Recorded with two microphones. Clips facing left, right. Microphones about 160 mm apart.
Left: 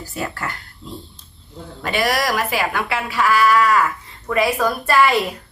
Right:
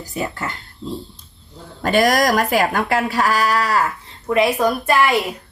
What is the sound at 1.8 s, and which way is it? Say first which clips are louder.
A woman's voice: right 5 dB; 45° right (ahead or behind).